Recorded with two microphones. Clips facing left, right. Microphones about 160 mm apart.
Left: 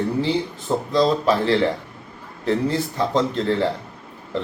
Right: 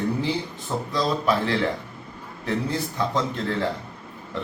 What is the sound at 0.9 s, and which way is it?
A man's voice, 30° left (ahead or behind).